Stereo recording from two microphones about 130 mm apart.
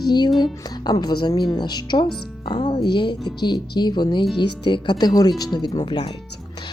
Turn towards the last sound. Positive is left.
turn(degrees=40)  # may be behind; listen again after turning